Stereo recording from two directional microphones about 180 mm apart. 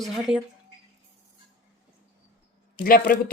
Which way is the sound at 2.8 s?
55° left (ahead or behind).